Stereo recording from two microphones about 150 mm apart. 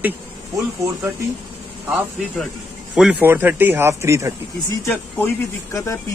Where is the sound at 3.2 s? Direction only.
15° right (ahead or behind).